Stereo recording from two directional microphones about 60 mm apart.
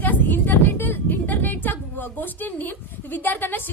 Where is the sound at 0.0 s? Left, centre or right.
Left.